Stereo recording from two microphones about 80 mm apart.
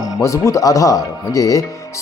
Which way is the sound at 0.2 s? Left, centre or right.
Left.